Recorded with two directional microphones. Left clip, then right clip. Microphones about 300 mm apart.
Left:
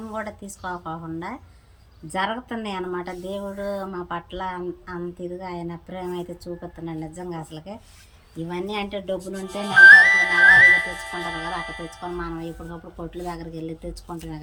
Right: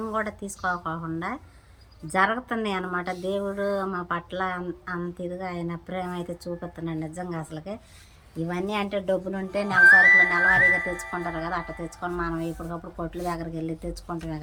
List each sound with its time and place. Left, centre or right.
0.1 s a woman's voice: centre
9.8 s speech: left
12.0 s a woman's voice: centre